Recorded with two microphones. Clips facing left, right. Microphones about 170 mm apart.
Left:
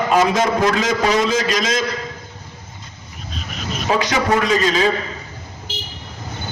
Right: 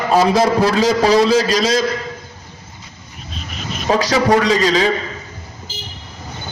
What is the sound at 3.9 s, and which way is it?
Speech, 35° right (ahead or behind).